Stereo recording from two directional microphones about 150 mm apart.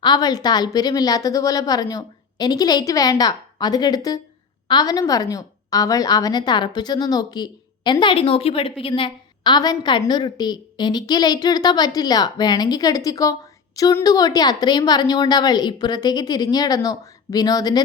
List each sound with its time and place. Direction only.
0.0 s a woman's voice: 25° left (ahead or behind)